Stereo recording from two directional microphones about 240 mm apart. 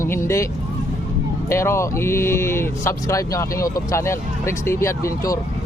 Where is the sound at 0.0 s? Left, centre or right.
Centre.